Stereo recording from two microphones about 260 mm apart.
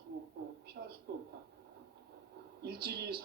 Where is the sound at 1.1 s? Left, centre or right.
Right.